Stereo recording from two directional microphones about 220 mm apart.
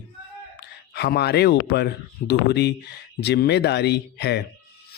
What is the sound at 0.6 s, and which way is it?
Speech, 50° left (ahead or behind).